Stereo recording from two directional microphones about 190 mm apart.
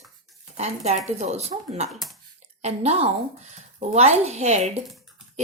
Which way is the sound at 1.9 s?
Centre (ahead or behind).